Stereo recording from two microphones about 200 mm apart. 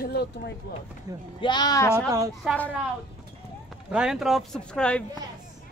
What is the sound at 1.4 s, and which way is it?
Speech, 20° left (ahead or behind).